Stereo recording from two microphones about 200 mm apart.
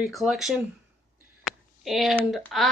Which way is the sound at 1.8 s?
Centre (ahead or behind).